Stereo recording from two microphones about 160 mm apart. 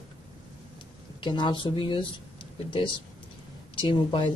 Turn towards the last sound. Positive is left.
turn(degrees=30)  # may be behind; listen again after turning